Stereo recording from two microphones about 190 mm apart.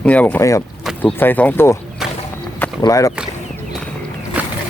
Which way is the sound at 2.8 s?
15° left (ahead or behind).